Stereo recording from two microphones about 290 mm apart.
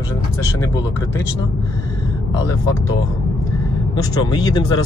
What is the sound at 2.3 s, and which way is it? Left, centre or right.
Speech, centre.